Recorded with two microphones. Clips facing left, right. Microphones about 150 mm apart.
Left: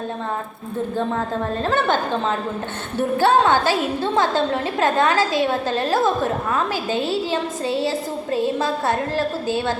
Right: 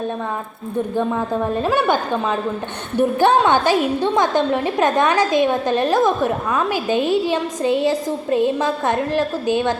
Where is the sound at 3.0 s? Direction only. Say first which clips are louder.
Right 2 dB; 15° right (ahead or behind).